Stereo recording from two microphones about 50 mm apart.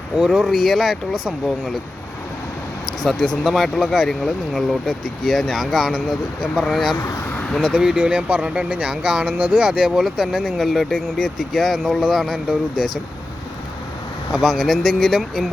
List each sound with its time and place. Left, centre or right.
0.2 s speech: centre
3.0 s speech: centre
14.3 s speech: centre